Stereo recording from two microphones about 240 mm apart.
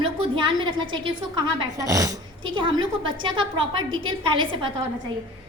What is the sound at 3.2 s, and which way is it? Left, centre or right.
Speech, right.